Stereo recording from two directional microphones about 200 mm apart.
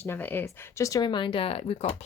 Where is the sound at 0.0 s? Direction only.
10° left (ahead or behind).